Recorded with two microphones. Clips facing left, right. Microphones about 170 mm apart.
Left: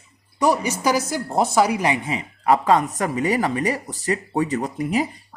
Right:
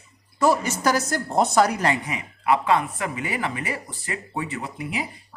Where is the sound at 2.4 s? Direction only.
40° left (ahead or behind).